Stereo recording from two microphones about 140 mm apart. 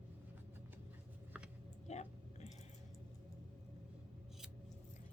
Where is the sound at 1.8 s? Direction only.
55° left (ahead or behind).